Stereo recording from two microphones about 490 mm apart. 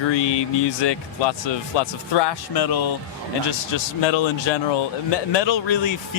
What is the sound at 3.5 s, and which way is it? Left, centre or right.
Speech, left.